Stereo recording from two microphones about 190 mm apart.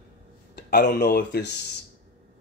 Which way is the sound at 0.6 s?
55° left (ahead or behind).